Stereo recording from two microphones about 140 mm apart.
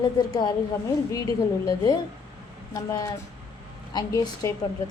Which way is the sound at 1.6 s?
30° left (ahead or behind).